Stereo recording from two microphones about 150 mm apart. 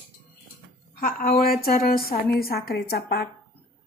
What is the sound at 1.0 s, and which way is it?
A woman's voice, 80° left.